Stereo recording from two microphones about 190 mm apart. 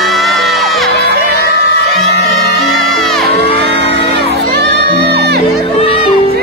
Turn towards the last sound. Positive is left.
turn(degrees=30)  # may be behind; listen again after turning